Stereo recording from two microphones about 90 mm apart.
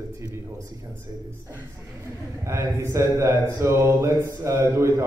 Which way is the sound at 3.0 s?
35° right (ahead or behind).